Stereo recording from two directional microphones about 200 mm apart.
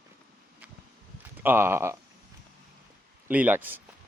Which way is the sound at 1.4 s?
10° right (ahead or behind).